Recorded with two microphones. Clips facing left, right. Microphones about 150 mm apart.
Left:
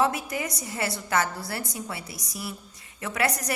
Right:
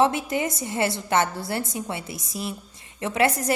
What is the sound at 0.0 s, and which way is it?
A woman's voice, 25° right (ahead or behind).